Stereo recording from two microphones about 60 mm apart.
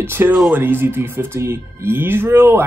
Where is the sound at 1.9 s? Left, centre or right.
Right.